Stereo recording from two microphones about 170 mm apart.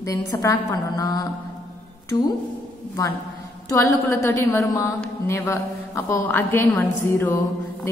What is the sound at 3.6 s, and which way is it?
A woman's voice, 15° left (ahead or behind).